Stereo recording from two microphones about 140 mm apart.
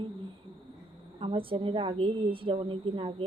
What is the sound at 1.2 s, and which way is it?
A woman's voice, 40° right (ahead or behind).